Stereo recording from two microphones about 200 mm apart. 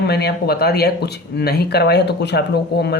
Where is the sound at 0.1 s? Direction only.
55° left (ahead or behind).